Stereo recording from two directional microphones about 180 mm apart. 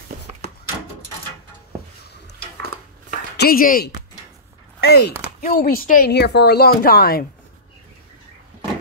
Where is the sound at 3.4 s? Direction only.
55° left (ahead or behind).